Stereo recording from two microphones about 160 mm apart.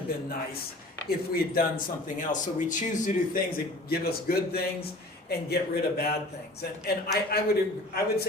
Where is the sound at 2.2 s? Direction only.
50° left (ahead or behind).